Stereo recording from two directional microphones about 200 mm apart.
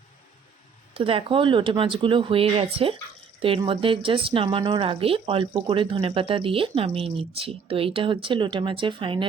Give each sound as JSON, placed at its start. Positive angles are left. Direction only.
{"t": 0.9, "sound": "speech", "side_deg": -25}